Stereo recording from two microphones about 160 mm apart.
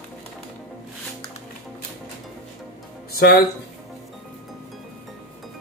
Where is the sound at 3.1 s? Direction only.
75° left (ahead or behind).